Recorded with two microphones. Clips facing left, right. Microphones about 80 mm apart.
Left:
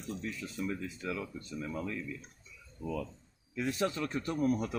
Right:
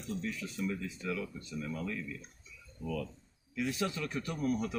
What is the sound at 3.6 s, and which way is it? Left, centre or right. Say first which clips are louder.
Speech: left 3 dB; left.